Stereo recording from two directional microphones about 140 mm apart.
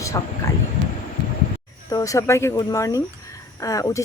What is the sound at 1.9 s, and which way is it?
Speech, 25° left (ahead or behind).